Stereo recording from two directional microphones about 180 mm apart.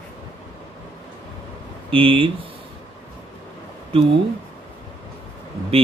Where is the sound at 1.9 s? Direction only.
30° right (ahead or behind).